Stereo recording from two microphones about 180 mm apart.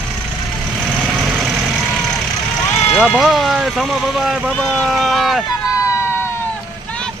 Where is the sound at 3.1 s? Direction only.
Centre (ahead or behind).